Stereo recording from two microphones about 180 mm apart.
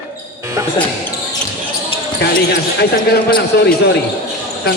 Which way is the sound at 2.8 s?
60° left (ahead or behind).